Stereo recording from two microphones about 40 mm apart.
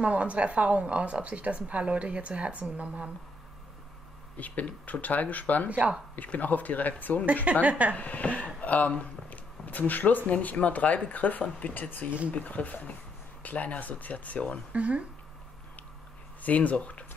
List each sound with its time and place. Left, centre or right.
0.0 s a woman's voice: right
4.4 s speech: left
5.7 s a woman's voice: right
6.1 s speech: left
7.5 s a woman's voice: right
7.9 s speech: left
8.9 s a sound: left
10.2 s speech: left
14.7 s a woman's voice: right
16.4 s speech: left